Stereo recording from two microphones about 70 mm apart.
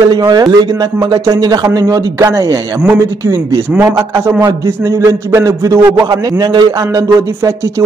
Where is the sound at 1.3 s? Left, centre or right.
Right.